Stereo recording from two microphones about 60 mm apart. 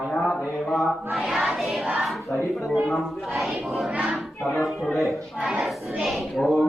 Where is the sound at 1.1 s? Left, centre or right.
Centre.